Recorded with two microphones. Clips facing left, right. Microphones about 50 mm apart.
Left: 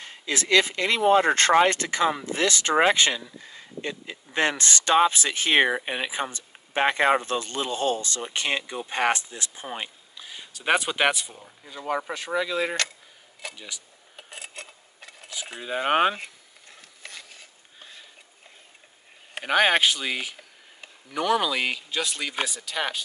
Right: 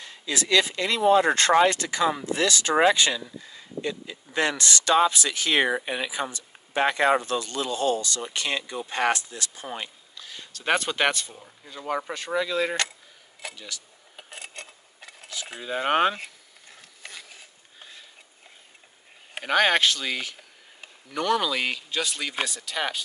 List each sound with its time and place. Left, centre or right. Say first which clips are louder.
0.0 s speech: left 1 dB; left; by 12.7 s centre
13.6 s speech: right 1 dB; centre
14.1 s filing: even; centre
15.4 s speech: even; centre
16.6 s ratchet: even; centre
19.4 s speech: left 1 dB; centre